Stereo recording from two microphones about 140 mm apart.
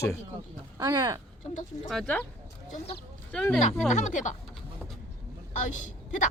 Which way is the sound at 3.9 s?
60° left (ahead or behind).